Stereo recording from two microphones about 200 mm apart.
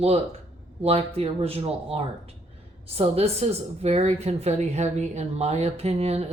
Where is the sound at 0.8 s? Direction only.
30° right (ahead or behind).